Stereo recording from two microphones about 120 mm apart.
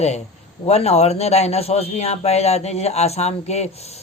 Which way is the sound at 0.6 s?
60° left (ahead or behind).